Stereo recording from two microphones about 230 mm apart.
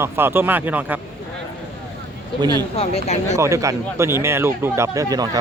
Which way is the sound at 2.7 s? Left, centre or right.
Left.